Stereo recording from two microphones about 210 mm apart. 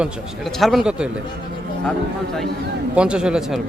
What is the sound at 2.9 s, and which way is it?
Speech, 5° right (ahead or behind).